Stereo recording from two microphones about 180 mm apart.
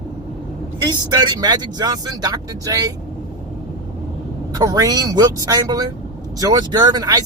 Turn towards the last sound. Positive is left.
turn(degrees=-20)  # may be behind; listen again after turning